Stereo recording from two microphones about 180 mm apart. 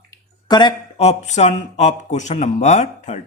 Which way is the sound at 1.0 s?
40° left (ahead or behind).